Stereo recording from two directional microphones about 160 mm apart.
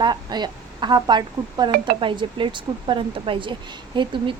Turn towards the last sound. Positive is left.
turn(degrees=-30)  # may be behind; listen again after turning